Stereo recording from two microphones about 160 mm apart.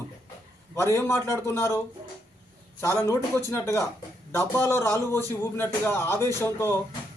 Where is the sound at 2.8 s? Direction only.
15° left (ahead or behind).